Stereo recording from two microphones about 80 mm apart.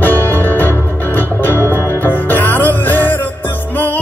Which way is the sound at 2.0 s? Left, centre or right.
Left.